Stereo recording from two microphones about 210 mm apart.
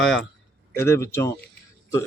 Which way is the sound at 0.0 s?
Centre (ahead or behind).